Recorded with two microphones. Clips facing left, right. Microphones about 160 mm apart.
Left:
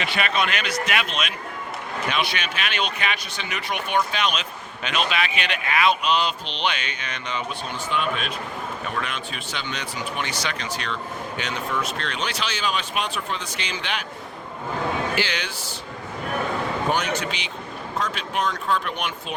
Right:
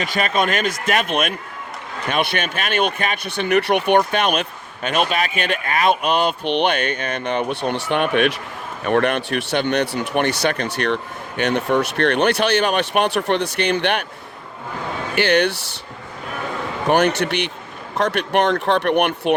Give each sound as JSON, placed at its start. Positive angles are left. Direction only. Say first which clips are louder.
{"t": 0.0, "sound": "speech", "louder": "right 4 dB", "side_deg": -40}
{"t": 15.1, "sound": "speech", "louder": "right 10 dB", "side_deg": -60}
{"t": 16.9, "sound": "speech", "louder": "right 8 dB", "side_deg": -65}